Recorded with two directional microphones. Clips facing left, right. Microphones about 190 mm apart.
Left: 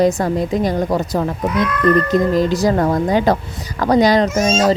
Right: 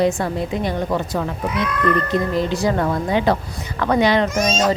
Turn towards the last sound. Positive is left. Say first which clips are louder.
# left 3 dB
turn(degrees=40)  # may be behind; listen again after turning